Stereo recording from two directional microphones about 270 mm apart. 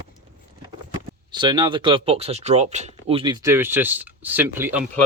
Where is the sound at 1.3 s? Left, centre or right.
Centre.